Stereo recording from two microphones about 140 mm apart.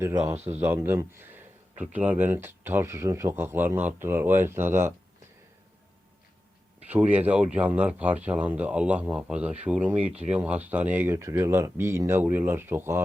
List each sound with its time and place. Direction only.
0.0 s speech: 20° right (ahead or behind)
6.8 s speech: 10° right (ahead or behind)